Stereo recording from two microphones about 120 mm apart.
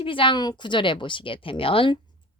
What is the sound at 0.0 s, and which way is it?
Speech, 45° left (ahead or behind).